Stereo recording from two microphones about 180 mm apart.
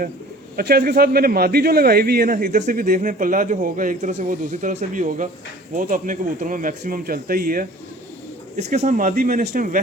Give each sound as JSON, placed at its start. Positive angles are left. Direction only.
{"t": 0.5, "sound": "speech", "side_deg": -55}
{"t": 8.5, "sound": "speech", "side_deg": -40}
{"t": 9.4, "sound": "a man's voice", "side_deg": -65}